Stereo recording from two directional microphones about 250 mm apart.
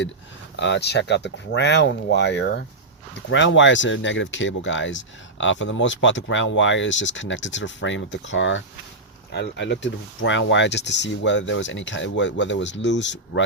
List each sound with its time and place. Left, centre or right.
0.5 s speech: left